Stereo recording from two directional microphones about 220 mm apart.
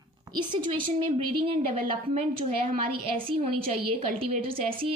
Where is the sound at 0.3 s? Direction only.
20° right (ahead or behind).